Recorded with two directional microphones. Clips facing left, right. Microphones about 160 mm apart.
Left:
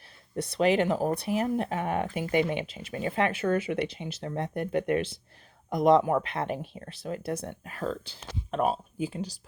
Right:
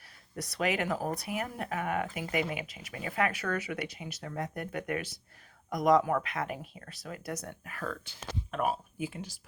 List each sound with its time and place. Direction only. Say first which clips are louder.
0.3 s speech: left 7 dB; 25° left (ahead or behind)